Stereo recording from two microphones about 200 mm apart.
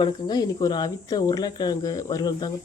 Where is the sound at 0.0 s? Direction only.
20° left (ahead or behind).